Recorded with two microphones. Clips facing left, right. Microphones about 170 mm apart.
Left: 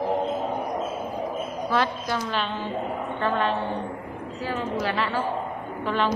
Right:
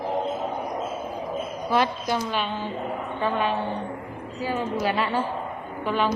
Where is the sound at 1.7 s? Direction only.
15° right (ahead or behind).